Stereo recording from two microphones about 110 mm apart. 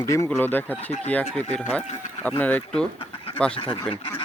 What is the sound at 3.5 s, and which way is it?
Speech, 55° left (ahead or behind).